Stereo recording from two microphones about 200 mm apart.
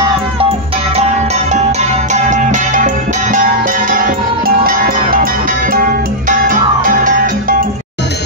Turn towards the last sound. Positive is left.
turn(degrees=-45)  # may be behind; listen again after turning